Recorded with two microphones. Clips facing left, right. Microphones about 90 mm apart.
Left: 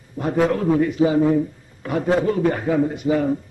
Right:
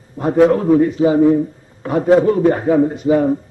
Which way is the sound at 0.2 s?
30° right (ahead or behind).